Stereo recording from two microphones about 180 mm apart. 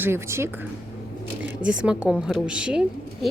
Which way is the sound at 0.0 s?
15° right (ahead or behind).